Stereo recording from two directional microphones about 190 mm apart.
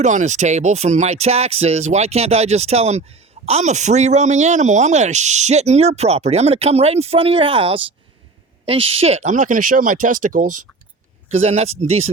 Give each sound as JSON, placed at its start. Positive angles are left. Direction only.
{"t": 0.0, "sound": "speech", "side_deg": -40}